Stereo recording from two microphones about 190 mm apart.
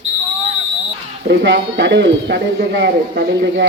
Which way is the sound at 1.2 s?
70° right (ahead or behind).